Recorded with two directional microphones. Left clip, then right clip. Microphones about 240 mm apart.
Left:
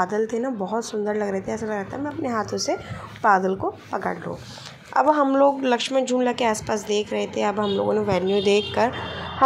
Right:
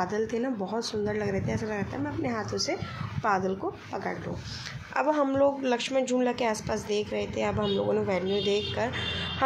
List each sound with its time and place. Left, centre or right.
0.0 s a woman's voice: centre